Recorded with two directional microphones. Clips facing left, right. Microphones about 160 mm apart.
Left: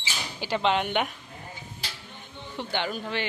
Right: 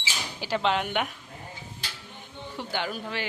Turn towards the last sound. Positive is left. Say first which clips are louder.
# left 2 dB
turn(degrees=-5)  # may be behind; listen again after turning